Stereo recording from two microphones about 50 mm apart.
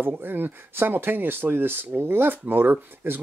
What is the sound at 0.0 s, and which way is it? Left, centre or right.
Speech, right.